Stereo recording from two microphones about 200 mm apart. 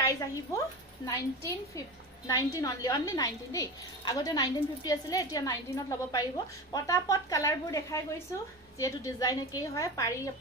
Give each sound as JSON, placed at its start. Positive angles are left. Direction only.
{"t": 1.0, "sound": "a woman's voice", "side_deg": 15}